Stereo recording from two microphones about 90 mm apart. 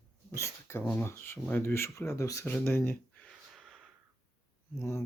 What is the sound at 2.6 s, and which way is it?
Speech, 25° left (ahead or behind).